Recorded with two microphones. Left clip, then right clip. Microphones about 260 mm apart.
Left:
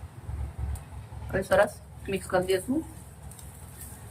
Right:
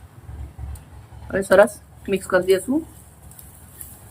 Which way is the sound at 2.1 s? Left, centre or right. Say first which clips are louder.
Right 9 dB; right.